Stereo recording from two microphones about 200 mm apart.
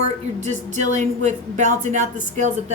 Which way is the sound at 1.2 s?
35° right (ahead or behind).